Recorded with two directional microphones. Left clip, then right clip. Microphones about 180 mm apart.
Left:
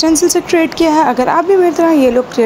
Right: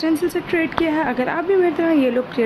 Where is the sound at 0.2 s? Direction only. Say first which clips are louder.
Left 9 dB; 30° left (ahead or behind).